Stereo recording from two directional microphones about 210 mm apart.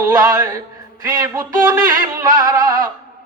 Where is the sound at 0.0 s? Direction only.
15° right (ahead or behind).